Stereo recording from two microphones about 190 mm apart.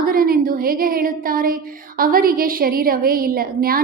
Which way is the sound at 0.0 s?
50° right (ahead or behind).